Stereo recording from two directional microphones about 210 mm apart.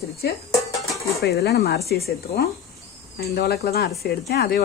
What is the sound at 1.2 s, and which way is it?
Speech, 50° left (ahead or behind).